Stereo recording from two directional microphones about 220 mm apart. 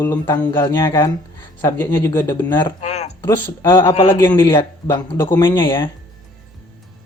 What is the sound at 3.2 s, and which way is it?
Speech, 10° left (ahead or behind).